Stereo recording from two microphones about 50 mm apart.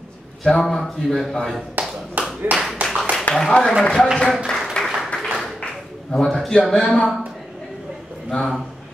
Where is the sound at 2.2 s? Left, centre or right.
Right.